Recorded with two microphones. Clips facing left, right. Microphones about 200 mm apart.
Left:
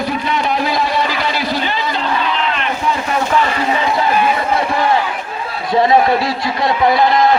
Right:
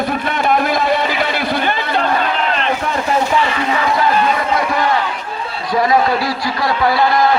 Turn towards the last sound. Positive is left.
turn(degrees=20)  # may be behind; listen again after turning